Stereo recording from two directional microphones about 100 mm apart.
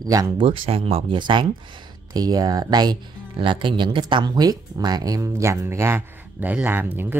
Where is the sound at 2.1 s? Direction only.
40° right (ahead or behind).